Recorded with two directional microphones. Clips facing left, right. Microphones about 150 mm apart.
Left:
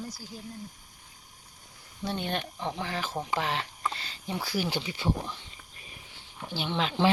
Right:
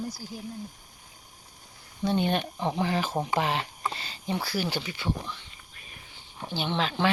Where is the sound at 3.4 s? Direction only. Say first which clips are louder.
Right 3 dB; 15° right (ahead or behind).